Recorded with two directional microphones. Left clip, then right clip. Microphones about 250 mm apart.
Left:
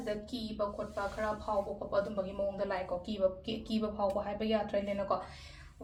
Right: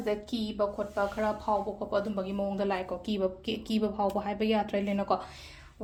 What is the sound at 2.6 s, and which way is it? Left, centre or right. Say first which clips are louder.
Speech: right 4 dB; right.